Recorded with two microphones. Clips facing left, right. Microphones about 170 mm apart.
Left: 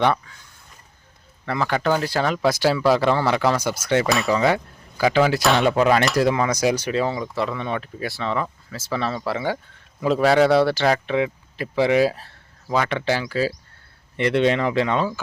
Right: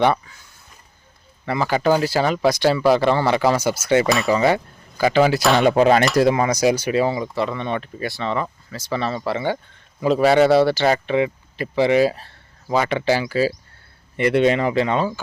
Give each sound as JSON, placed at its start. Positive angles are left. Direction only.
{"t": 0.0, "sound": "speech", "side_deg": -5}
{"t": 1.5, "sound": "speech", "side_deg": -5}
{"t": 5.6, "sound": "speech", "side_deg": -35}
{"t": 6.3, "sound": "speech", "side_deg": -10}